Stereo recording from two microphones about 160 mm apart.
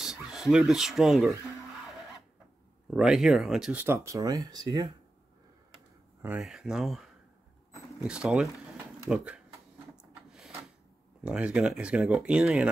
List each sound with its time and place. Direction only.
0.0 s speech: 5° right (ahead or behind)
2.9 s speech: 5° right (ahead or behind)
3.8 s speech: 15° right (ahead or behind)
6.2 s speech: 5° right (ahead or behind)
8.1 s speech: 5° right (ahead or behind)
11.2 s speech: 5° right (ahead or behind)